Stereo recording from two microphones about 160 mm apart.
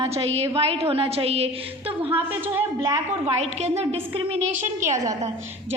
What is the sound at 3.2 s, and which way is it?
A woman's voice, 40° right (ahead or behind).